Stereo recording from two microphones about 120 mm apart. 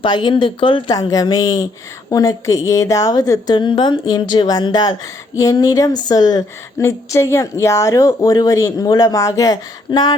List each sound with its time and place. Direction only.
0.0 s a woman's voice: 40° left (ahead or behind)
0.9 s a woman's voice: 30° left (ahead or behind)
3.5 s a woman's voice: 40° left (ahead or behind)